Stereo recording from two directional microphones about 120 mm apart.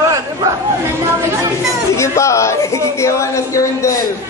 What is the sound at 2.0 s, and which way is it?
Speech, 25° left (ahead or behind).